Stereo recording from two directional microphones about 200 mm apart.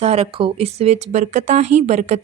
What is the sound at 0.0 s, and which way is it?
Speech, 30° right (ahead or behind).